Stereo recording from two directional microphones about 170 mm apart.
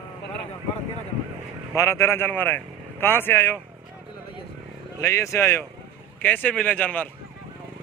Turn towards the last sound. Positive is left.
turn(degrees=10)  # may be behind; listen again after turning